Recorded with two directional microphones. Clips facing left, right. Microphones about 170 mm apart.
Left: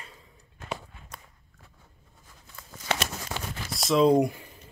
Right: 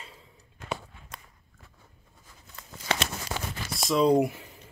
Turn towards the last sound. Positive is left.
turn(degrees=0)  # may be behind; listen again after turning